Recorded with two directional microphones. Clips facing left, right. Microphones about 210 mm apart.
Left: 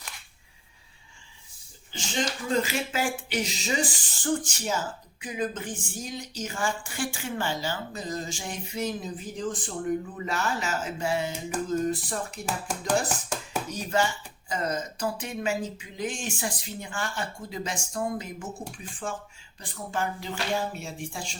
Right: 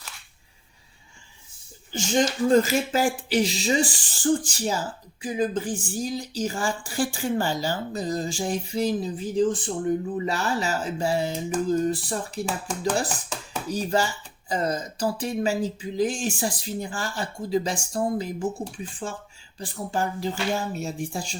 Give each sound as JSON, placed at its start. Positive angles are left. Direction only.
{"t": 1.9, "sound": "speech", "side_deg": -45}
{"t": 19.5, "sound": "speech", "side_deg": -35}